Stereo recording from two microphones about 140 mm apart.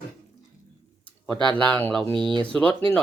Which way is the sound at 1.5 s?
10° left (ahead or behind).